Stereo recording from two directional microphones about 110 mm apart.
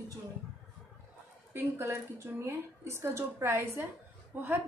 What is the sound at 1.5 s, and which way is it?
A woman's voice, 25° right (ahead or behind).